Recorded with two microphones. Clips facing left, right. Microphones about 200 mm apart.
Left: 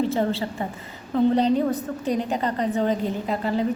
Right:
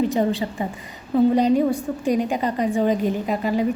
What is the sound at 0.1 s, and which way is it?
A woman's voice, 15° right (ahead or behind).